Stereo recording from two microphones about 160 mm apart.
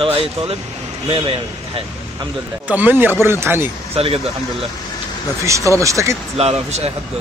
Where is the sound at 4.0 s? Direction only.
40° right (ahead or behind).